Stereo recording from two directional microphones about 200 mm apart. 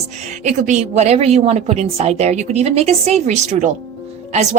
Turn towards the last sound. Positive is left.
turn(degrees=-35)  # may be behind; listen again after turning